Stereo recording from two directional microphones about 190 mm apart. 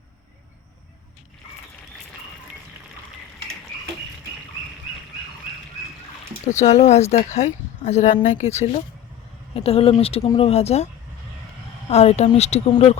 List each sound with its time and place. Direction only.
6.5 s speech: 40° left (ahead or behind)
11.9 s speech: 35° left (ahead or behind)